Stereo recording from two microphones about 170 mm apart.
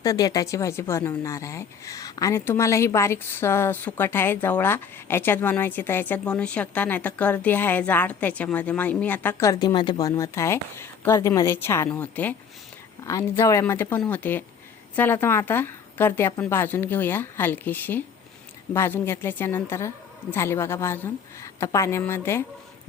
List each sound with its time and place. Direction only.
0.0 s speech: 20° left (ahead or behind)